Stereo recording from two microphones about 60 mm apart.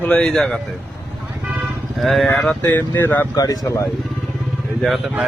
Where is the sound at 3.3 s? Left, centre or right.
Left.